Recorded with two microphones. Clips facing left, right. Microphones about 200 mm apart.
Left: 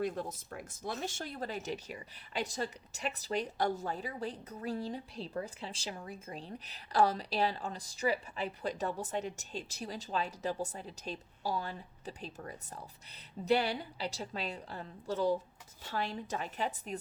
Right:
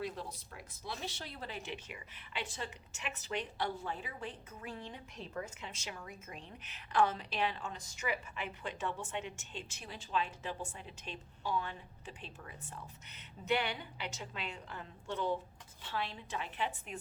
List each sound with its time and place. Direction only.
0.0 s speech: 50° left (ahead or behind)